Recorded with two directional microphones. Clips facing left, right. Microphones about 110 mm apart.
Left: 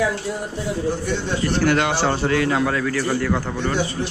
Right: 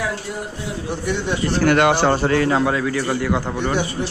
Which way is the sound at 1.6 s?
55° right (ahead or behind).